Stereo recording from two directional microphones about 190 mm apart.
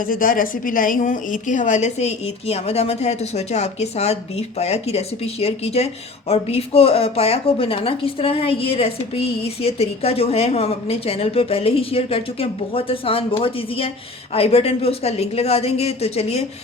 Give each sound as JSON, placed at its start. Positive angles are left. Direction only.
{"t": 0.0, "sound": "a woman's voice", "side_deg": 45}